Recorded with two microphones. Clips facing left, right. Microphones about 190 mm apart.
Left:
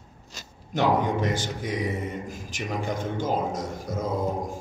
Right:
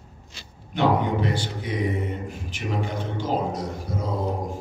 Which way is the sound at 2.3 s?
45° left (ahead or behind).